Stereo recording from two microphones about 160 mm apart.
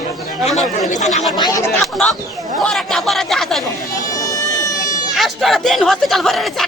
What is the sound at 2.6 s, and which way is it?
Speech, centre (ahead or behind).